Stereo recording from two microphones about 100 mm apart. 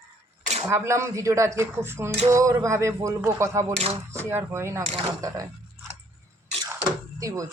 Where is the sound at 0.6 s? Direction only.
25° right (ahead or behind).